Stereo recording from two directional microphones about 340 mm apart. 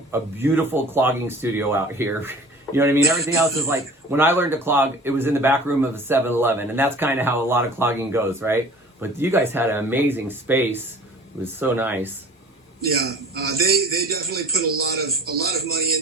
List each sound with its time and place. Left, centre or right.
0.1 s speech: centre
12.8 s a man's voice: right